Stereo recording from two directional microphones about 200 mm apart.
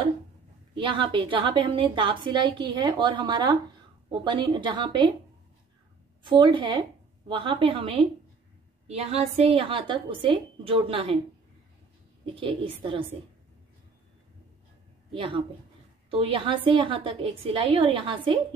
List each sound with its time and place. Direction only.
0.7 s a woman's voice: 25° right (ahead or behind)
6.2 s a woman's voice: 25° right (ahead or behind)
12.4 s a woman's voice: 25° right (ahead or behind)
15.1 s a woman's voice: 25° right (ahead or behind)